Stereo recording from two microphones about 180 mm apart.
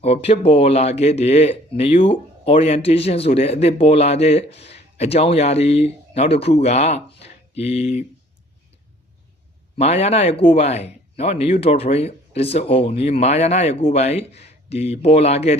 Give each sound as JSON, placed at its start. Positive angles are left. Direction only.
{"t": 0.0, "sound": "speech", "side_deg": 35}
{"t": 9.7, "sound": "speech", "side_deg": 35}